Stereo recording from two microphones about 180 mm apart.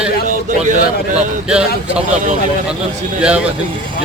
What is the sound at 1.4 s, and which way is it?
Speech, 5° right (ahead or behind).